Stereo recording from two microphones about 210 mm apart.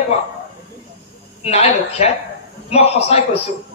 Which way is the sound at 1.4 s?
30° left (ahead or behind).